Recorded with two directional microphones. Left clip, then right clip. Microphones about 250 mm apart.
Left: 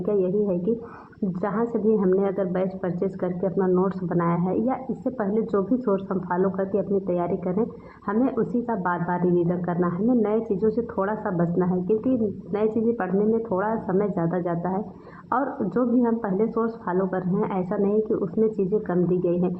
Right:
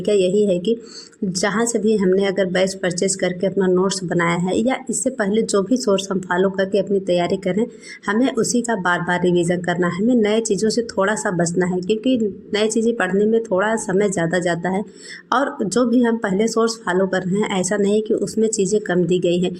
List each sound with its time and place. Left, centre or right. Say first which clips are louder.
0.0 s speech: right 7 dB; right